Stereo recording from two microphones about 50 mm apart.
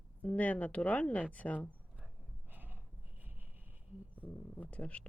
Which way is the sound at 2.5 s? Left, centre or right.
Right.